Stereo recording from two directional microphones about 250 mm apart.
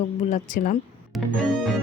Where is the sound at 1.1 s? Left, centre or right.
Centre.